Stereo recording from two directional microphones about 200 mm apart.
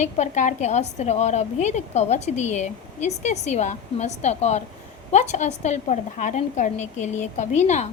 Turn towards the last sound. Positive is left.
turn(degrees=35)  # may be behind; listen again after turning